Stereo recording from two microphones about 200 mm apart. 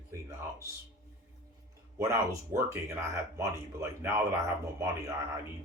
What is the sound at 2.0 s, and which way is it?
Speech, 15° right (ahead or behind).